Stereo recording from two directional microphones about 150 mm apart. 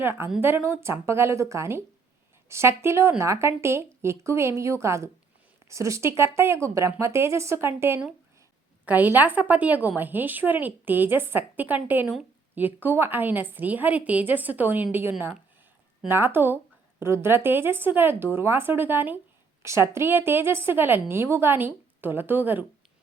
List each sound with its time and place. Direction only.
0.0 s a woman's voice: 15° right (ahead or behind)
16.0 s a woman's voice: 15° right (ahead or behind)